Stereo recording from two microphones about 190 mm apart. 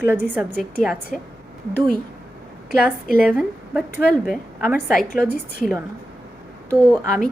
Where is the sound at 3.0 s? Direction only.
45° left (ahead or behind).